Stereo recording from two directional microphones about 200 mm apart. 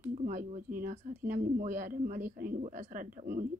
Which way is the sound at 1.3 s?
45° right (ahead or behind).